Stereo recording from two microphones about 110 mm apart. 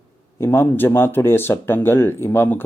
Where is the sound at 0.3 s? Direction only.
20° left (ahead or behind).